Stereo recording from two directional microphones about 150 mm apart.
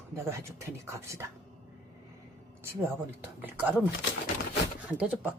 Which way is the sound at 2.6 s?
15° right (ahead or behind).